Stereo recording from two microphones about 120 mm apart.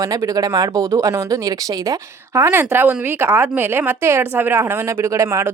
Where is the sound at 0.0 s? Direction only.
30° right (ahead or behind).